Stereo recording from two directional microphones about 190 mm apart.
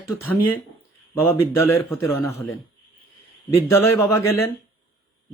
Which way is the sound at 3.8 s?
10° left (ahead or behind).